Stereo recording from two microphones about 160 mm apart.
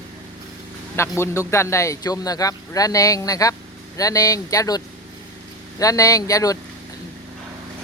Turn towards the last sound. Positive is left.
turn(degrees=20)  # may be behind; listen again after turning